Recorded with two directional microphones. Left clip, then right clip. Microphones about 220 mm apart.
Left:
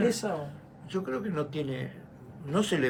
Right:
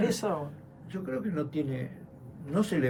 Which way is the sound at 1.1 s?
25° left (ahead or behind).